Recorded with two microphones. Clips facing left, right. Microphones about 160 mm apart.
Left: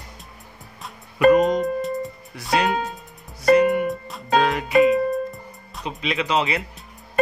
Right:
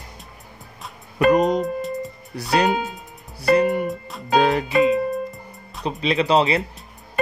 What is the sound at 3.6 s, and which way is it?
Music, 40° right (ahead or behind).